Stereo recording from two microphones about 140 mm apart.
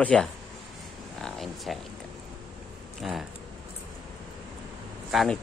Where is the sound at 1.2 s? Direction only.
Centre (ahead or behind).